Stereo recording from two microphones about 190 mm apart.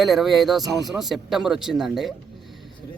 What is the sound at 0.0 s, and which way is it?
Speech, centre (ahead or behind).